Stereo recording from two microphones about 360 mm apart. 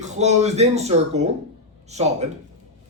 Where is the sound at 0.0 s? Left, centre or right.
Centre.